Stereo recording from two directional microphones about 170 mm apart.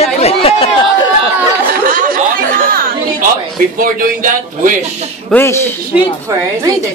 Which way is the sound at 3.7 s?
55° right (ahead or behind).